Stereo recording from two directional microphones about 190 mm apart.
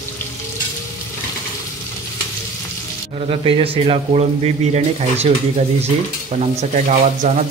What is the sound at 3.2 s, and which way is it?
Speech, 30° right (ahead or behind).